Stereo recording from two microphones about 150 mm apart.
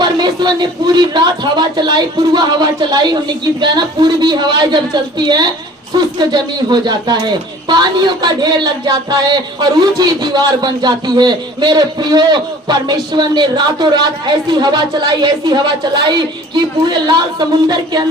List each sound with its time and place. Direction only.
0.0 s speech: 30° right (ahead or behind)